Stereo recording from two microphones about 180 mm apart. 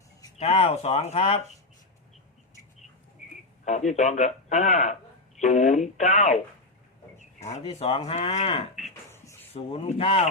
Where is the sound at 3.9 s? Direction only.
40° left (ahead or behind).